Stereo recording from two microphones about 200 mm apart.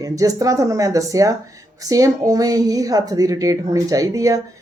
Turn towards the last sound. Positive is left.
turn(degrees=-15)  # may be behind; listen again after turning